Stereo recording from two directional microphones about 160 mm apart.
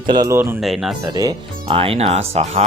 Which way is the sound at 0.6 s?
Centre (ahead or behind).